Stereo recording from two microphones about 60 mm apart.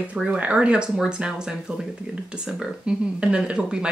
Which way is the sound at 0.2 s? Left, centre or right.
Right.